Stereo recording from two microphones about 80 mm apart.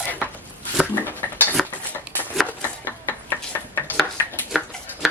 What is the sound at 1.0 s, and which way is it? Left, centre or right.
Dishes, left.